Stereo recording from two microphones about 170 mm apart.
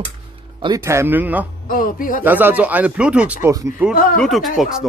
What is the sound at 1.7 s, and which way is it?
Speech, 55° left (ahead or behind).